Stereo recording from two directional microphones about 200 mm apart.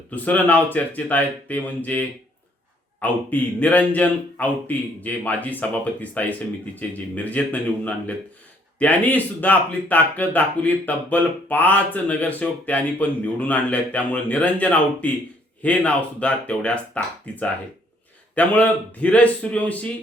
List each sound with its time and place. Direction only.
0.1 s speech: 5° left (ahead or behind)